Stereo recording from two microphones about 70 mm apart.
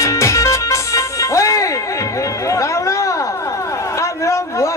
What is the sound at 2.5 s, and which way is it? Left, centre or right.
Chatter, left.